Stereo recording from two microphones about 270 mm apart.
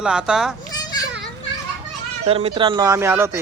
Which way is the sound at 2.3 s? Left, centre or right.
Right.